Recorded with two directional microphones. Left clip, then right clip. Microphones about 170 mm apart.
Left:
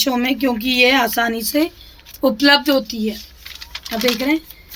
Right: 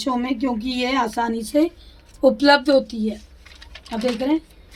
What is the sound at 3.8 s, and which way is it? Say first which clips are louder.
Speech: left 4 dB; 45° left (ahead or behind).